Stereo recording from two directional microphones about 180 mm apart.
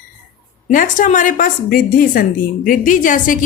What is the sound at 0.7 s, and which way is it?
A woman's voice, 45° left (ahead or behind).